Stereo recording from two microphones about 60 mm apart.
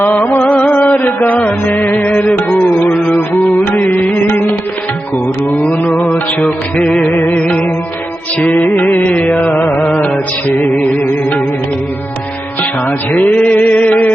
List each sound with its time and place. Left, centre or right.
0.0 s music: left
3.6 s music: left
6.4 s music: centre
7.1 s music: left
7.3 s music: left
13.1 s music: left